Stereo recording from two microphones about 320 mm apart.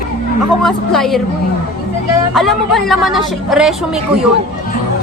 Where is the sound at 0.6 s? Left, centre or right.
Centre.